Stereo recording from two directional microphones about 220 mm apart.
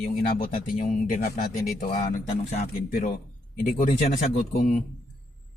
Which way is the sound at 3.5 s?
35° left (ahead or behind).